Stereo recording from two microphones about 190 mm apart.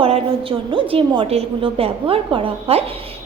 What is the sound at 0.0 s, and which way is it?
A woman's voice, 30° right (ahead or behind).